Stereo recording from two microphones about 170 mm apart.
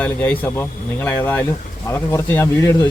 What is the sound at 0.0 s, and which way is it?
A man's voice, 10° left (ahead or behind).